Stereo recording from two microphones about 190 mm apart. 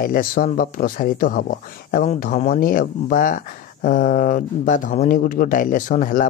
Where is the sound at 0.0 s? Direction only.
50° left (ahead or behind).